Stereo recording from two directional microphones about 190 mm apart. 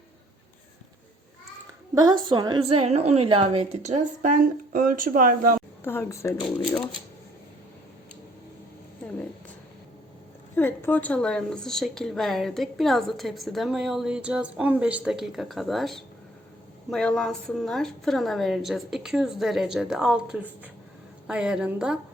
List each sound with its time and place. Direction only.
2.0 s a woman's voice: 20° right (ahead or behind); by 5.5 s 45° right (ahead or behind)
5.8 s speech: 10° left (ahead or behind)
10.5 s a woman's voice: 10° left (ahead or behind); by 21.9 s 5° right (ahead or behind)